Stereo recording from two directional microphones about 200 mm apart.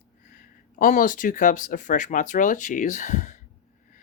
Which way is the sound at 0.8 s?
40° left (ahead or behind).